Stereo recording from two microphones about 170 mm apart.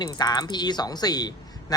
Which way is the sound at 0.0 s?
25° left (ahead or behind).